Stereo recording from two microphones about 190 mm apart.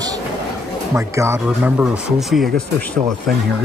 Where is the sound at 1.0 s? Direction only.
15° right (ahead or behind).